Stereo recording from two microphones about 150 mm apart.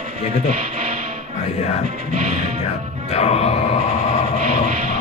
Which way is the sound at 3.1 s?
45° left (ahead or behind).